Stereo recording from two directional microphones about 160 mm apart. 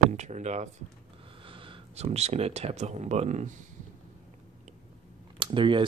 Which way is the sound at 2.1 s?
40° right (ahead or behind).